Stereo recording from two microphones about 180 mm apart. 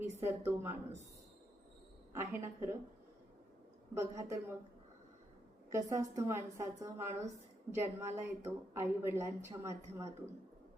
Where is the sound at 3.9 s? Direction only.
15° right (ahead or behind).